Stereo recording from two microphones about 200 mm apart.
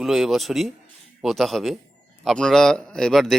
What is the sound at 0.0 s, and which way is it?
A man's voice, centre (ahead or behind).